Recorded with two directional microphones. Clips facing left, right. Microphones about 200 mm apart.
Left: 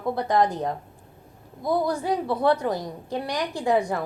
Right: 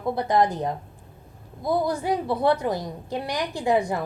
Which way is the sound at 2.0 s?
10° right (ahead or behind).